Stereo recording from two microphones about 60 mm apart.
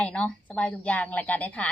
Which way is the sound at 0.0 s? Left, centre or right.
Centre.